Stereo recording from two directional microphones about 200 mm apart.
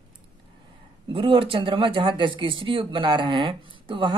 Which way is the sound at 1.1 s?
25° right (ahead or behind).